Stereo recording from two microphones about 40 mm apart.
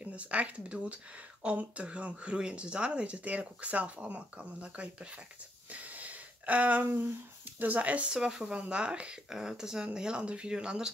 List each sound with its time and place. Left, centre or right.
0.0 s speech: right
5.7 s a sound: right
7.5 s speech: right
8.1 s speech: centre
9.3 s speech: centre